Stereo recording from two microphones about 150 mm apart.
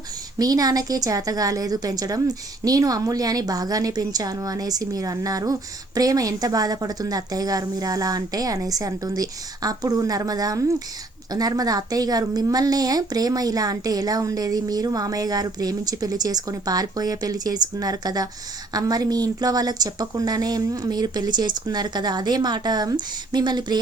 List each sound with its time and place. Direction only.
0.3 s a woman's voice: 25° right (ahead or behind)